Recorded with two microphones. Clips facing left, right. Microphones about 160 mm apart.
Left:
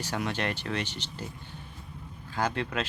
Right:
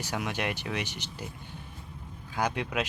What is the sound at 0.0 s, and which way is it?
Speech, 10° right (ahead or behind).